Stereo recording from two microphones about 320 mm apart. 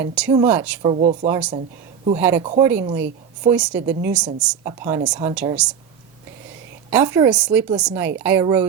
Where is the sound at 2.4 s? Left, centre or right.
Centre.